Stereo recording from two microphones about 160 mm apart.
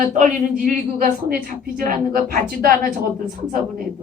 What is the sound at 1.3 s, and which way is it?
A woman's voice, 65° right (ahead or behind).